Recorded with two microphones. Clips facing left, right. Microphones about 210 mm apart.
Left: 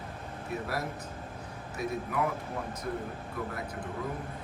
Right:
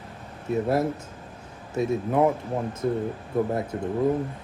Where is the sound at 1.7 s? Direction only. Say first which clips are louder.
Right 10 dB; 30° right (ahead or behind).